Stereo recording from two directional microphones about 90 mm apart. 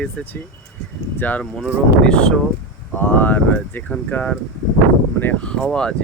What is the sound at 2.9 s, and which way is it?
Speech, 20° left (ahead or behind).